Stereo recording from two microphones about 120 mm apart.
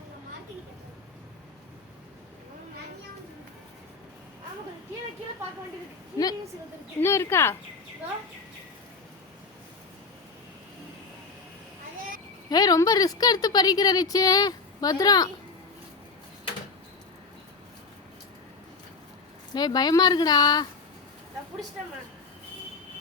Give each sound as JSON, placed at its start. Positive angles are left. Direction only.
{"t": 7.0, "sound": "speech", "side_deg": 20}
{"t": 12.5, "sound": "a woman's voice", "side_deg": 35}
{"t": 19.5, "sound": "a woman's voice", "side_deg": 35}